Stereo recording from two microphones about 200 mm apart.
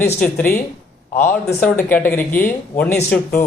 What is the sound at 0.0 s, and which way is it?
Speech, 10° left (ahead or behind).